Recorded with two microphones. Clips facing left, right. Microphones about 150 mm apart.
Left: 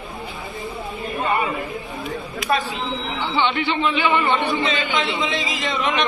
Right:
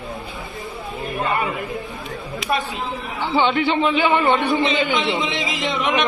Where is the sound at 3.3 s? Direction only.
45° right (ahead or behind).